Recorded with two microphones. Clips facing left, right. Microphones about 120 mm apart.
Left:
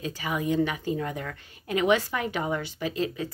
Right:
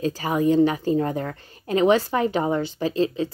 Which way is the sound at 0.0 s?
35° right (ahead or behind).